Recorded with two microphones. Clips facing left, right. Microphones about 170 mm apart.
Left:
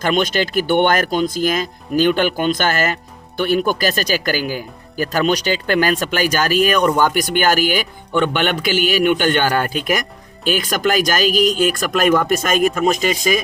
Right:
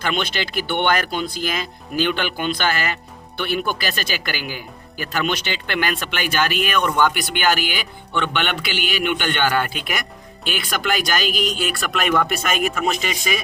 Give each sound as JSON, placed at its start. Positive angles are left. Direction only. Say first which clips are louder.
{"t": 0.0, "sound": "speech", "louder": "left 6 dB", "side_deg": 45}